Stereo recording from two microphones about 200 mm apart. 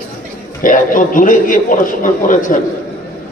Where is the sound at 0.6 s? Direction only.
40° left (ahead or behind).